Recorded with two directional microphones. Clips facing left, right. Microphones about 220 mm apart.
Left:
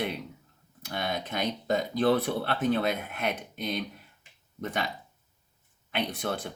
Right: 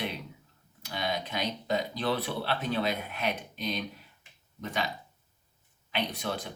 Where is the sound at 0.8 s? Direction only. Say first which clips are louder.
Left 1 dB; 50° left (ahead or behind).